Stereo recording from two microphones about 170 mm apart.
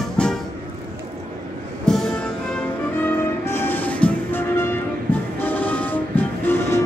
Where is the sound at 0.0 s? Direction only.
5° left (ahead or behind).